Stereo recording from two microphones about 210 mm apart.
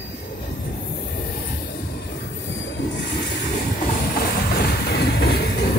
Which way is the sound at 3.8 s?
40° left (ahead or behind).